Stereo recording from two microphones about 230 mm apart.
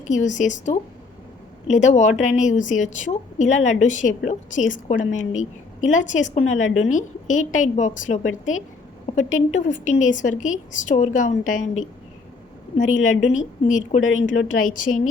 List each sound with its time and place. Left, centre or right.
0.0 s a woman's voice: left
12.7 s a woman's voice: left